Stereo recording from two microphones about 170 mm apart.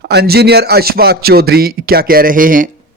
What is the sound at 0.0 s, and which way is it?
A man's voice, 70° right (ahead or behind).